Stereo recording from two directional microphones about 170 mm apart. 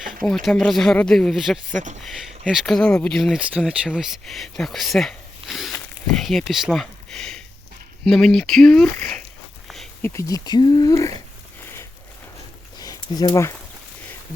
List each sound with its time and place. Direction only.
0.0 s speech: centre (ahead or behind)
1.7 s speech: 45° right (ahead or behind)
2.0 s speech: centre (ahead or behind)
9.6 s a sound: centre (ahead or behind)
10.0 s speech: 15° left (ahead or behind)
12.8 s a sound: 20° left (ahead or behind)